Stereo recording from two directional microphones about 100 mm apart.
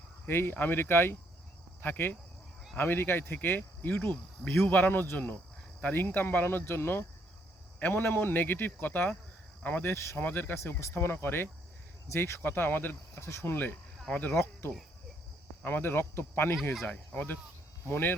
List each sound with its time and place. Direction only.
0.3 s cricket: 20° left (ahead or behind)
16.8 s speech: 15° left (ahead or behind)
17.8 s cricket: 20° left (ahead or behind)